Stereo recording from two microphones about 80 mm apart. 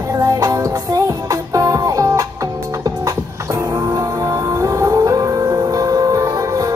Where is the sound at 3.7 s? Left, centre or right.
Right.